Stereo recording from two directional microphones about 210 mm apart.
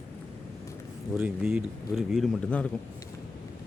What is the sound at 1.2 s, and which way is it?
A man's voice, 10° right (ahead or behind).